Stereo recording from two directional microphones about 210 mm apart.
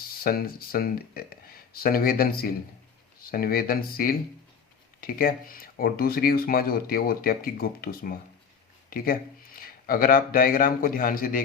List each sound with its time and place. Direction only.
0.2 s speech: 45° left (ahead or behind)
9.6 s speech: 45° left (ahead or behind)